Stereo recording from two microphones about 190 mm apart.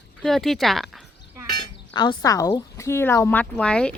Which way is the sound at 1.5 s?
20° left (ahead or behind).